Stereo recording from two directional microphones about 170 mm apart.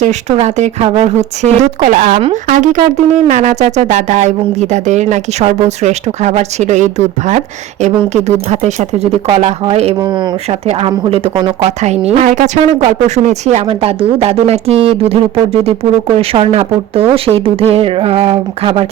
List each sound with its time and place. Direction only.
0.0 s speech: 45° right (ahead or behind)
2.1 s speech: 35° right (ahead or behind)
2.5 s speech: 50° right (ahead or behind)
10.0 s speech: 30° right (ahead or behind)